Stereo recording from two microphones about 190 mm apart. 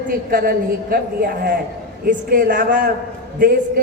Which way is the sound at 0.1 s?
50° right (ahead or behind).